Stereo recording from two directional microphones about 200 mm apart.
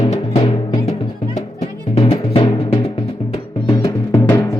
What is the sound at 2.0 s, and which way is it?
Music, 25° left (ahead or behind).